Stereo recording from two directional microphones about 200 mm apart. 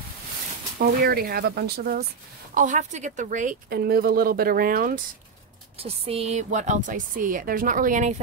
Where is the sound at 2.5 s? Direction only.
40° right (ahead or behind).